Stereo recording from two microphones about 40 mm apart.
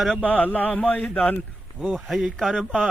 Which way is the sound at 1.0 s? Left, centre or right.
Left.